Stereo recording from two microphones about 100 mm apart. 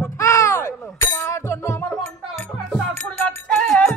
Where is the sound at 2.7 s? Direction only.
5° left (ahead or behind).